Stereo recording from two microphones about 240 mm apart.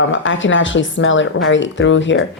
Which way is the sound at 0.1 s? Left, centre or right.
Left.